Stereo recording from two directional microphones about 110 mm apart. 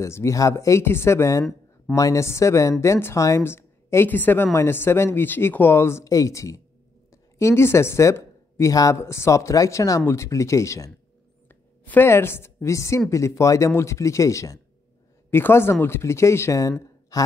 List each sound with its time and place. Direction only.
0.0 s speech: 25° left (ahead or behind)
11.4 s a woman's voice: 15° left (ahead or behind); by 17.3 s 35° left (ahead or behind)